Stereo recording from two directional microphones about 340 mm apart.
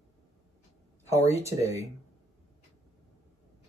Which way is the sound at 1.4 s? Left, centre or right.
Centre.